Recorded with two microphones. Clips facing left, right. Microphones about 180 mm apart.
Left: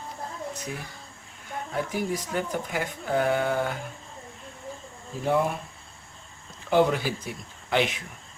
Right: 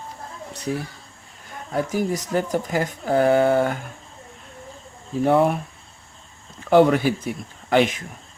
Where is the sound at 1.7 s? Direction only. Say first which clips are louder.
Right 6 dB; 40° right (ahead or behind).